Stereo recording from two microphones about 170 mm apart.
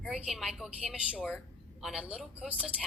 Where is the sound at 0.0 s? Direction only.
Centre (ahead or behind).